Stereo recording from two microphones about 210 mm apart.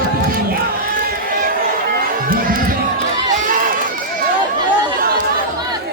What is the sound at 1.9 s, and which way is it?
Music, 45° right (ahead or behind).